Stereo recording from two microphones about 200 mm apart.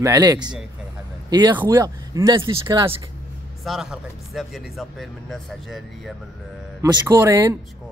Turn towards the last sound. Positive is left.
turn(degrees=-15)  # may be behind; listen again after turning